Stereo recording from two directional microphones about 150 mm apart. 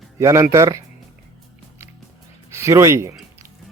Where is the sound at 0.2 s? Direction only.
20° right (ahead or behind).